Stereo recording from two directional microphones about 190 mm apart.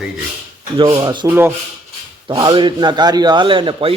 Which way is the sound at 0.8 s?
25° right (ahead or behind).